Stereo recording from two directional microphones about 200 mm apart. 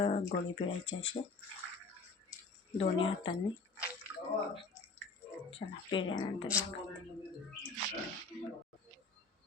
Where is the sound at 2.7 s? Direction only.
25° left (ahead or behind).